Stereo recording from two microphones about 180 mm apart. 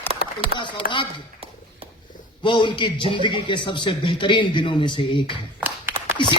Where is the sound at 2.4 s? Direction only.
25° left (ahead or behind).